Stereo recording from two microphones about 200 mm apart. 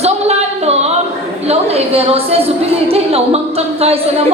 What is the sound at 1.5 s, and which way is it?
A woman's voice, 30° right (ahead or behind).